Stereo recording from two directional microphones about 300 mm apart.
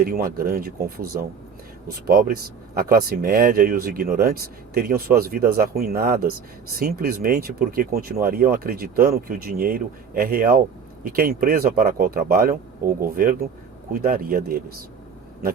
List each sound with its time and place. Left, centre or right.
0.0 s speech: right